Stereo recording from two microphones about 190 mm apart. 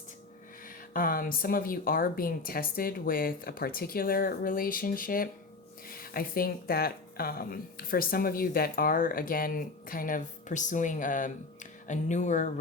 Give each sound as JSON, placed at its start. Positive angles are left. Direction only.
{"t": 0.9, "sound": "speech", "side_deg": 50}